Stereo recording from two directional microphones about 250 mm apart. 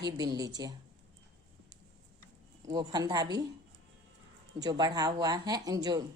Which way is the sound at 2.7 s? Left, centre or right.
Centre.